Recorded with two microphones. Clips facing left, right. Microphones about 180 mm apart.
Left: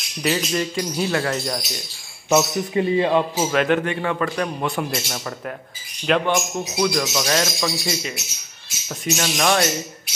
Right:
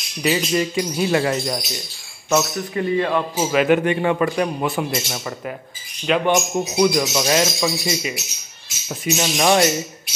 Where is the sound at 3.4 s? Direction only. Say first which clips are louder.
Right 2 dB; 5° right (ahead or behind).